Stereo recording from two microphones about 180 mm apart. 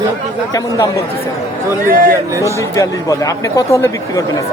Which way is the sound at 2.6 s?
20° left (ahead or behind).